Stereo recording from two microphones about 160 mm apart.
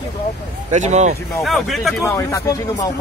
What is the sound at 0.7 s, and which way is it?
Speech, 45° right (ahead or behind).